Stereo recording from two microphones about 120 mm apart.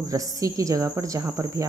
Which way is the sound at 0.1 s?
30° right (ahead or behind).